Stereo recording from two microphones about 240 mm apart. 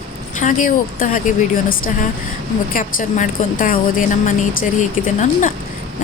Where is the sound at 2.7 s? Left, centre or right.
Left.